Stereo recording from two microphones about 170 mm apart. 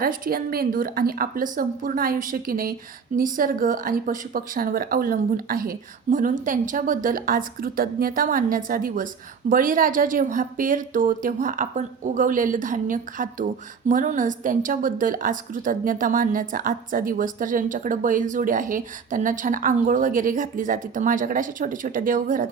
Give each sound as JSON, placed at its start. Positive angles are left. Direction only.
{"t": 0.0, "sound": "a woman's voice", "side_deg": -60}